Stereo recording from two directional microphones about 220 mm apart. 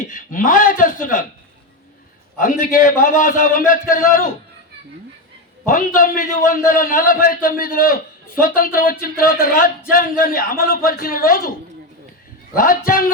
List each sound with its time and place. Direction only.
0.0 s speech: 35° left (ahead or behind)
2.4 s speech: 40° left (ahead or behind)
5.6 s speech: 35° left (ahead or behind)
12.5 s speech: 40° left (ahead or behind)